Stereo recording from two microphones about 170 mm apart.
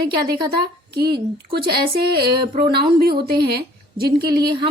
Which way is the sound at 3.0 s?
70° right (ahead or behind).